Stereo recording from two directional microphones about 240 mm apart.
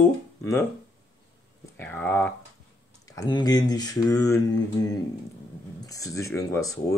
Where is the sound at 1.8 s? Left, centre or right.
Centre.